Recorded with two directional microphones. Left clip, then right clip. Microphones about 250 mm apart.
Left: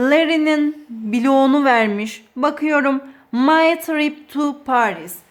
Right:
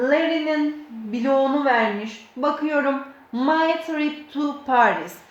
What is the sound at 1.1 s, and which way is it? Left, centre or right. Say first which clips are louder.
Speech: left 5 dB; left.